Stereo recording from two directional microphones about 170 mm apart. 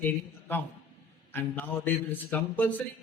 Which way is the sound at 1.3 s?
15° left (ahead or behind).